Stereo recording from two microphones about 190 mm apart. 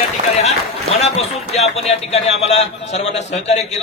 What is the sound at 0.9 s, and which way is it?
A man's voice, 35° left (ahead or behind).